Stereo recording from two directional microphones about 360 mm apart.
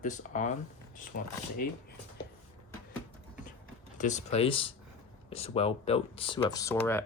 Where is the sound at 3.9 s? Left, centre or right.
Centre.